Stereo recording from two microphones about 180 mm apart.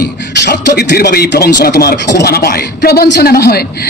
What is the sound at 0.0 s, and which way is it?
A woman's voice, 60° left (ahead or behind).